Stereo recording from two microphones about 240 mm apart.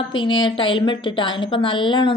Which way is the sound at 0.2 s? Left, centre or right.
Centre.